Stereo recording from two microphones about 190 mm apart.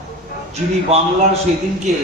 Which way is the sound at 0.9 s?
30° right (ahead or behind).